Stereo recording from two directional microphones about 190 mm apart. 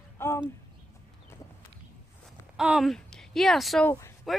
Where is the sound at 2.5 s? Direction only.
5° right (ahead or behind).